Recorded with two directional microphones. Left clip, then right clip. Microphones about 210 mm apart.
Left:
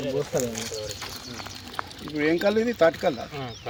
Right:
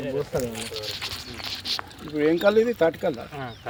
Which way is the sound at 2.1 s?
50° right (ahead or behind).